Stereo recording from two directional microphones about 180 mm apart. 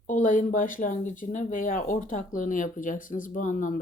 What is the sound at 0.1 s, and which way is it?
Speech, 50° left (ahead or behind).